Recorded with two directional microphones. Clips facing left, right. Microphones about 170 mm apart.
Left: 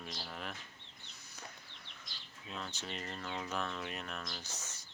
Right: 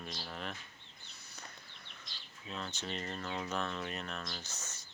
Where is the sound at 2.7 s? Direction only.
5° left (ahead or behind).